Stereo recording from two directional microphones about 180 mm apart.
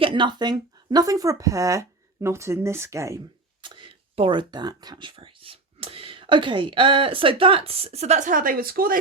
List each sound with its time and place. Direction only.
0.0 s speech: 25° right (ahead or behind)
3.6 s speech: 30° right (ahead or behind); by 9.0 s 55° right (ahead or behind)